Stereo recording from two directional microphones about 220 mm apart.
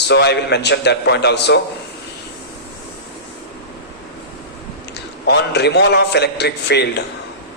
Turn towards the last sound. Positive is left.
turn(degrees=50)  # may be behind; listen again after turning